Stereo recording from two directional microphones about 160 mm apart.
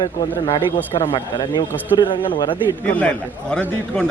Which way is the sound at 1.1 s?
30° left (ahead or behind).